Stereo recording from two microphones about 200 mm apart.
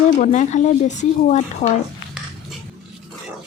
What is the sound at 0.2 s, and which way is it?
Speech, 35° left (ahead or behind).